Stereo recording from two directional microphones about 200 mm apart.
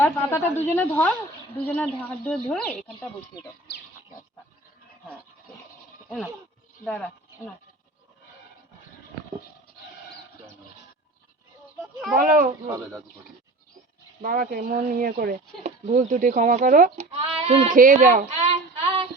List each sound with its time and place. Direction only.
0.0 s speech: 10° left (ahead or behind)
6.1 s speech: centre (ahead or behind)
12.1 s speech: 45° right (ahead or behind)
12.6 s speech: 15° right (ahead or behind)
14.2 s speech: 45° right (ahead or behind)